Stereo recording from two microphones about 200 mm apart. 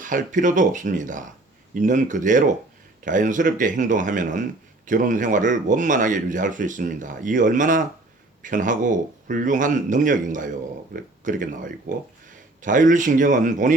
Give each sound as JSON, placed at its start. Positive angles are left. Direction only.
{"t": 0.0, "sound": "speech", "side_deg": -40}